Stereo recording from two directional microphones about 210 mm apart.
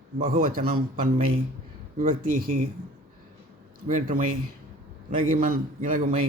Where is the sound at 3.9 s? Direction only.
40° right (ahead or behind).